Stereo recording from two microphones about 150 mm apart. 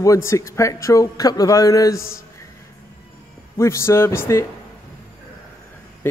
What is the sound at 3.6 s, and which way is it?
Speech, 20° left (ahead or behind).